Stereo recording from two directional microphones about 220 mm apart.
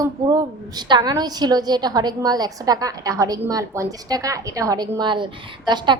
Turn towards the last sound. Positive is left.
turn(degrees=-20)  # may be behind; listen again after turning